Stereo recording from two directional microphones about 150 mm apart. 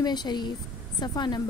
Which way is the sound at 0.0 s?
30° left (ahead or behind).